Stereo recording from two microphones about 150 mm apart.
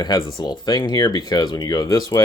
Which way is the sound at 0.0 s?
30° left (ahead or behind).